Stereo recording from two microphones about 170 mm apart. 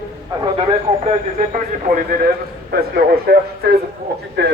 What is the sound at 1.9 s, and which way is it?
A man's voice, 60° right (ahead or behind).